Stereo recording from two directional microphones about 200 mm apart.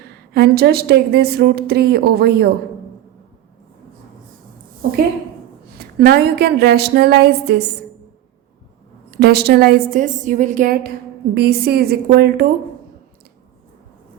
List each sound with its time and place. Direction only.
0.3 s a woman's voice: 55° right (ahead or behind)
5.7 s a woman's voice: 50° right (ahead or behind)
9.0 s a woman's voice: 55° right (ahead or behind)